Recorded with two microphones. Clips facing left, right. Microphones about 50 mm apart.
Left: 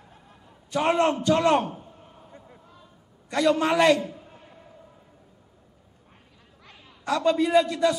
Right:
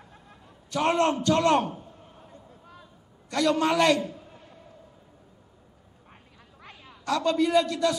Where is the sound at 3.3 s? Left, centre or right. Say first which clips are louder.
Left 2 dB; centre.